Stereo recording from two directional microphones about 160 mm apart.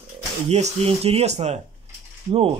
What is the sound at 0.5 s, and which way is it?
Speech, 45° right (ahead or behind).